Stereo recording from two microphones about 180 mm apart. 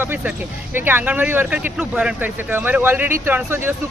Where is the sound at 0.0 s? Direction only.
10° right (ahead or behind).